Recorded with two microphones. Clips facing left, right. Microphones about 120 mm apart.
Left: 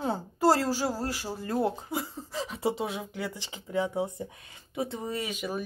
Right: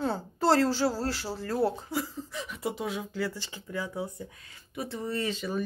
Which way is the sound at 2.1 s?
35° left (ahead or behind).